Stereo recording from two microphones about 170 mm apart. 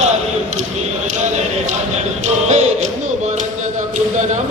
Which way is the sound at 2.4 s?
40° right (ahead or behind).